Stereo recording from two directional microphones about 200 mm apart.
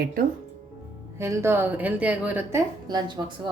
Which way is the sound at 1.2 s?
15° right (ahead or behind).